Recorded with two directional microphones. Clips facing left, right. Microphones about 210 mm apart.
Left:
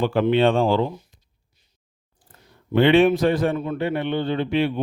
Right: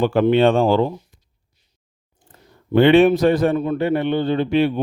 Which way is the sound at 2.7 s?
45° right (ahead or behind).